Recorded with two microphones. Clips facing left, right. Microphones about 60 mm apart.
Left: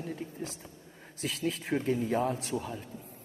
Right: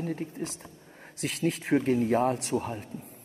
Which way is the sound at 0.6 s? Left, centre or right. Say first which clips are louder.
Right 2 dB; right.